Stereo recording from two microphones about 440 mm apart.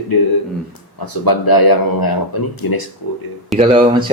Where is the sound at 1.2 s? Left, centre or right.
Left.